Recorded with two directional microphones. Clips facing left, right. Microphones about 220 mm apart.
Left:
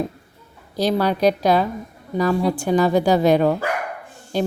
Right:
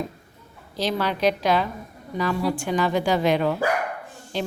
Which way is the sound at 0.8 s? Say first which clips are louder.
Left 5 dB; 40° left (ahead or behind).